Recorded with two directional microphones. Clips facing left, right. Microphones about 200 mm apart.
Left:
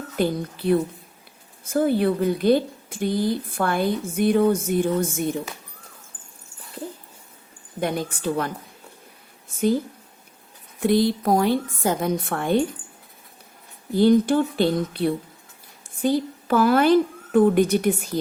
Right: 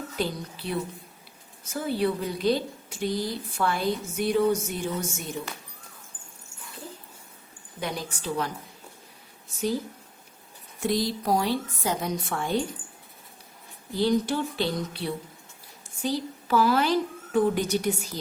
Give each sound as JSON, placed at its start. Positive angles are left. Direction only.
{"t": 0.2, "sound": "a woman's voice", "side_deg": 55}
{"t": 7.8, "sound": "a woman's voice", "side_deg": 55}
{"t": 10.8, "sound": "a woman's voice", "side_deg": 60}
{"t": 13.9, "sound": "a woman's voice", "side_deg": 55}